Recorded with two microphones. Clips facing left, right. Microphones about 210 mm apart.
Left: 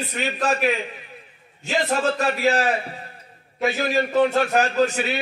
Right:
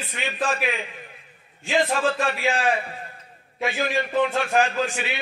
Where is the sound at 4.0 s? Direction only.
40° left (ahead or behind).